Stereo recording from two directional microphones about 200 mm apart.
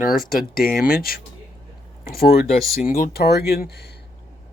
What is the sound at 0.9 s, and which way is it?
Speech, 45° left (ahead or behind).